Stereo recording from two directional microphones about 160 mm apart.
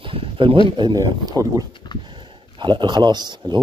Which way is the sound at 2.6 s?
30° right (ahead or behind).